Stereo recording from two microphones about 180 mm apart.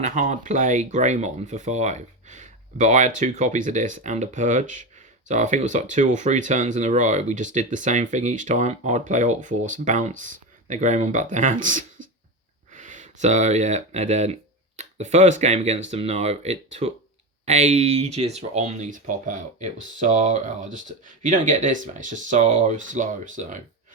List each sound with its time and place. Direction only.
0.0 s speech: 45° right (ahead or behind)